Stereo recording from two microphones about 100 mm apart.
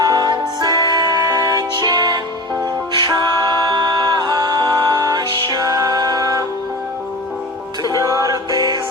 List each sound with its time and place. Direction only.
0.0 s music: 40° right (ahead or behind)
7.9 s music: 35° right (ahead or behind)